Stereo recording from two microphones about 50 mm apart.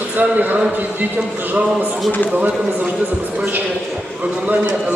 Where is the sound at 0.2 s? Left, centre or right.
Right.